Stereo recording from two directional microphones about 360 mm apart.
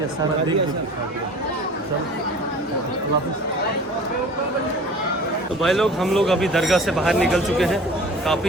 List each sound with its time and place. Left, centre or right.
5.6 s speech: centre